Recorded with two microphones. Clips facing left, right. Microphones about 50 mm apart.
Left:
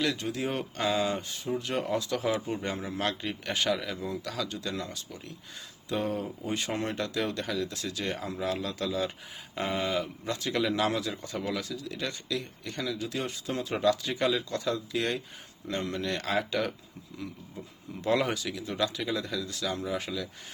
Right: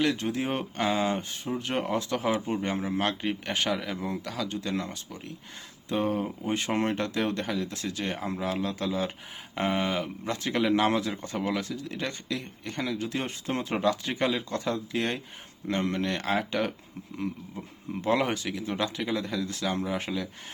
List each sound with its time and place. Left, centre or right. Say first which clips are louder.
0.0 s speech: right 3 dB; right
2.7 s speech: right 3 dB; right
3.9 s speech: right 2 dB; right
4.4 s speech: right 3 dB; right
6.2 s speech: right 3 dB; right
13.7 s speech: left 1 dB; right
18.0 s speech: right 1 dB; right